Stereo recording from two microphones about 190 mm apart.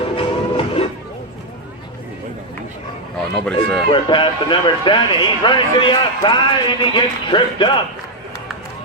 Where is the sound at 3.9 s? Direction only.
25° left (ahead or behind).